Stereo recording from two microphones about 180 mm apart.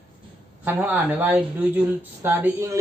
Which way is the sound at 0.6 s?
10° right (ahead or behind).